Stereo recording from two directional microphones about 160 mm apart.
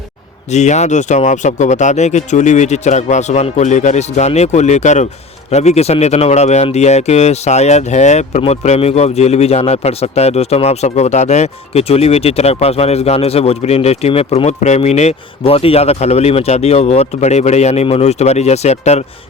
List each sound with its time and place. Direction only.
0.5 s speech: 45° left (ahead or behind)